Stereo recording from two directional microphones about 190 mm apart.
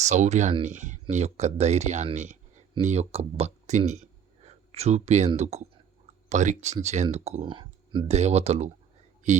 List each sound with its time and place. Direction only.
0.0 s speech: 40° right (ahead or behind)